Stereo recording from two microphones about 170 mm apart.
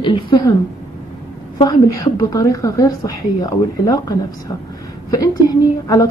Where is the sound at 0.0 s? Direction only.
25° left (ahead or behind).